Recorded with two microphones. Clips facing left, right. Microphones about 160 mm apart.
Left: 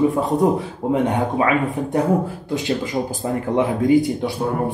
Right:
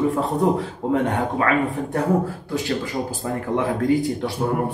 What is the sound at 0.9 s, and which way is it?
Speech, 15° left (ahead or behind).